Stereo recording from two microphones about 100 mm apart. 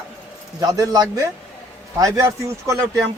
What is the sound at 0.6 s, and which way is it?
A man's voice, 40° right (ahead or behind).